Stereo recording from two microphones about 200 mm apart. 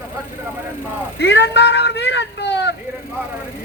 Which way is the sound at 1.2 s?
60° left (ahead or behind).